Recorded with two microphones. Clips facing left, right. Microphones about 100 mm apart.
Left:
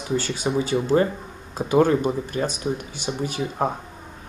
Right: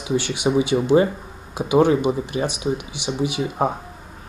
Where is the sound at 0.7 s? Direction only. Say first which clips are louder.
Right 2 dB; 10° right (ahead or behind).